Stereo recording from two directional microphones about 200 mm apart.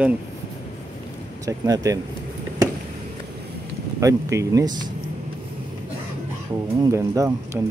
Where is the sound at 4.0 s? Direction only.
15° right (ahead or behind).